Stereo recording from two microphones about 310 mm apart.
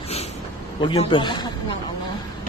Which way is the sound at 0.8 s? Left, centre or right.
Centre.